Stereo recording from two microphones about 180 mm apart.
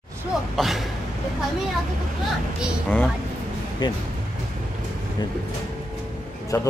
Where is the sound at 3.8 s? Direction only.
25° left (ahead or behind).